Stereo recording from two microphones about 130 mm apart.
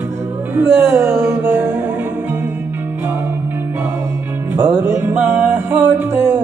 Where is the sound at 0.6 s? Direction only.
15° right (ahead or behind).